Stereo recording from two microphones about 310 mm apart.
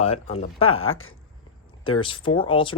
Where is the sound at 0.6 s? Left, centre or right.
Left.